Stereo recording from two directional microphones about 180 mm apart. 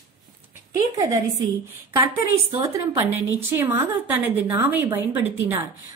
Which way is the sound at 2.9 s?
15° right (ahead or behind).